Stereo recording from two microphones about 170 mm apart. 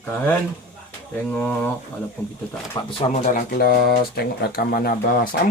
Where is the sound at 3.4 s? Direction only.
65° left (ahead or behind).